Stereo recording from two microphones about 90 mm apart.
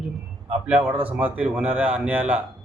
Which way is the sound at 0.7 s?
20° right (ahead or behind).